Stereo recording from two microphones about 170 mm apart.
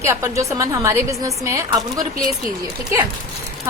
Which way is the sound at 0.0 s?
15° right (ahead or behind).